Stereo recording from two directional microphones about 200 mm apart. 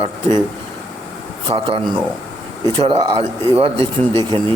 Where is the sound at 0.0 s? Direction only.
20° right (ahead or behind).